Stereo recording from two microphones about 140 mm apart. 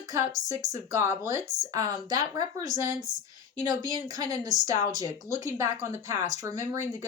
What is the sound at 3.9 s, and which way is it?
Speech, 30° right (ahead or behind).